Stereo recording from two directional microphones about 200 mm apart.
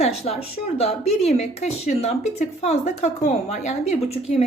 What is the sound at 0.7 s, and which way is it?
Speech, 30° left (ahead or behind).